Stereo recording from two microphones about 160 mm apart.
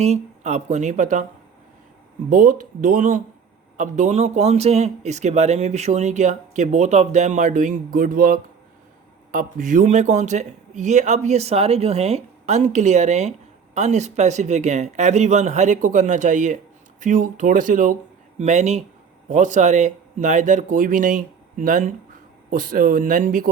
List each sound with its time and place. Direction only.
0.0 s speech: 45° right (ahead or behind)
2.3 s speech: 55° right (ahead or behind)